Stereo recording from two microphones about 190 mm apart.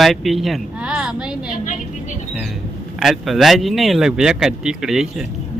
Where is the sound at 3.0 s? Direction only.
Centre (ahead or behind).